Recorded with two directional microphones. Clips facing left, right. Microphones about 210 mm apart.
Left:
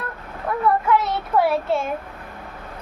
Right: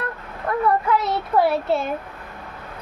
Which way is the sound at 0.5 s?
5° left (ahead or behind).